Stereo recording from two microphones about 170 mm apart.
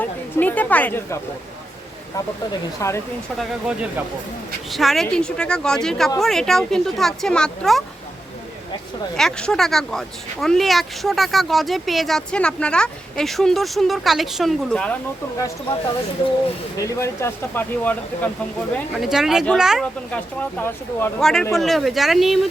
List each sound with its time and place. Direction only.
0.0 s speech: 10° left (ahead or behind)
3.3 s speech: 5° right (ahead or behind)
9.1 s speech: 5° left (ahead or behind)
16.7 s speech: 20° left (ahead or behind)
18.9 s speech: centre (ahead or behind)
20.1 s speech: 10° left (ahead or behind)